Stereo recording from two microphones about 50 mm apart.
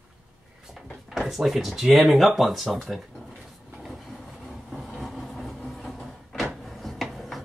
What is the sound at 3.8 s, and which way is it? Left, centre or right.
Train, centre.